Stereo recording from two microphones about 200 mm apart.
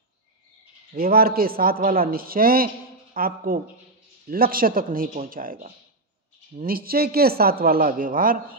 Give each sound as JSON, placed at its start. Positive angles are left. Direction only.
{"t": 0.9, "sound": "a man's voice", "side_deg": -50}